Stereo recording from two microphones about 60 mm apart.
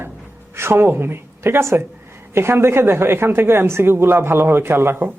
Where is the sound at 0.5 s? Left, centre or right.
Right.